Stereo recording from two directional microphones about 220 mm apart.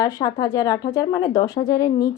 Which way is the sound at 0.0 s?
15° left (ahead or behind).